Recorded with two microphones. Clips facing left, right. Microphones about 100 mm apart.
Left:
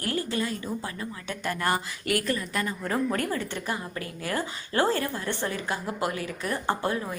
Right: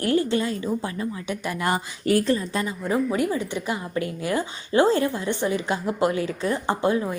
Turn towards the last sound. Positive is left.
turn(degrees=-20)  # may be behind; listen again after turning